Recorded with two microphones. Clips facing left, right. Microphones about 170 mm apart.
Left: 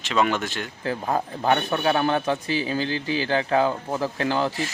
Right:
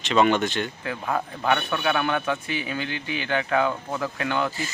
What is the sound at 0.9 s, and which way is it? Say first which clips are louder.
Speech: left 2 dB; 35° left (ahead or behind).